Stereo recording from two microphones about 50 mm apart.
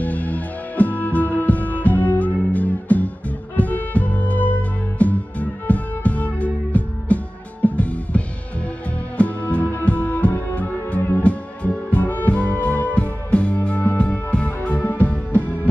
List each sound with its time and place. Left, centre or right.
0.0 s music: left
11.0 s music: left
11.2 s music: left